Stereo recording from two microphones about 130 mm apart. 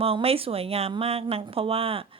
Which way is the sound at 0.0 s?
50° right (ahead or behind).